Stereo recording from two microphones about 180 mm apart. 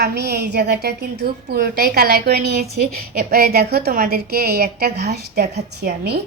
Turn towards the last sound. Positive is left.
turn(degrees=-65)  # may be behind; listen again after turning